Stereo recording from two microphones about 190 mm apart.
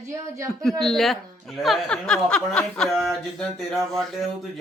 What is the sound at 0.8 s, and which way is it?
A woman's voice, centre (ahead or behind).